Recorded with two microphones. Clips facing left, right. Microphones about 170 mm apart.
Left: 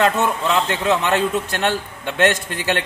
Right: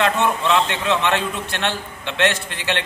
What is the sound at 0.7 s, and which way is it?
A man's voice, 40° left (ahead or behind).